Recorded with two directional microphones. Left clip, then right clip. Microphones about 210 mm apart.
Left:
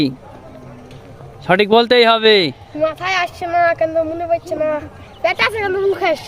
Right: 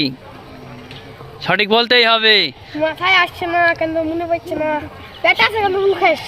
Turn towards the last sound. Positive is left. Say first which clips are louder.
# right 2 dB
turn(degrees=20)  # may be behind; listen again after turning